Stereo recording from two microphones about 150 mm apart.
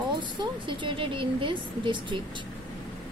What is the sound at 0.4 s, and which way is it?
Speech, 35° right (ahead or behind).